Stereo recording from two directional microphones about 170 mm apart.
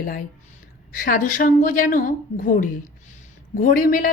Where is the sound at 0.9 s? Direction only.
50° left (ahead or behind).